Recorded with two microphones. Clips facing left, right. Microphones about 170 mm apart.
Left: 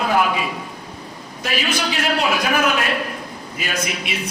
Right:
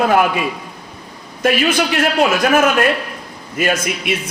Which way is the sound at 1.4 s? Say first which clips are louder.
Right 8 dB; 55° right (ahead or behind).